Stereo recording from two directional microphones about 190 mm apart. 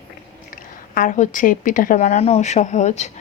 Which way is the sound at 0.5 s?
45° left (ahead or behind).